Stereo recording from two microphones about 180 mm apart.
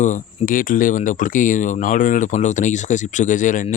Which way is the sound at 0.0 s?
45° left (ahead or behind).